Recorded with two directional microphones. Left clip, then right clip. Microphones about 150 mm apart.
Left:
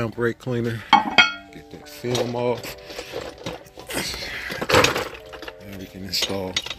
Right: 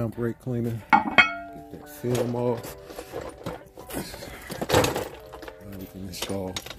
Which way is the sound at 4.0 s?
5° right (ahead or behind).